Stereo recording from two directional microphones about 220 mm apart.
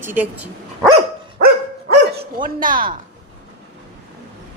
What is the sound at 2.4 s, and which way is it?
Speech, 40° right (ahead or behind).